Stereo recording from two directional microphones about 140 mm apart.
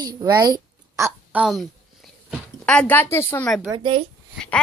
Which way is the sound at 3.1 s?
15° left (ahead or behind).